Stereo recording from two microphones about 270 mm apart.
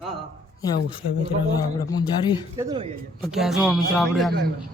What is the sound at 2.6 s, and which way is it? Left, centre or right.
Speech, centre.